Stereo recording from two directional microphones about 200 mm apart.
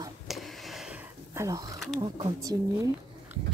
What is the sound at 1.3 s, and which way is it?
Speech, 15° right (ahead or behind).